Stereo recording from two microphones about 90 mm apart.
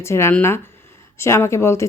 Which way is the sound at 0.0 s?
30° left (ahead or behind).